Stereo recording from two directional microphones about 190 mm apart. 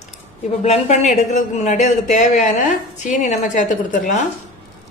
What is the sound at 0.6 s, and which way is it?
A woman's voice, 35° left (ahead or behind).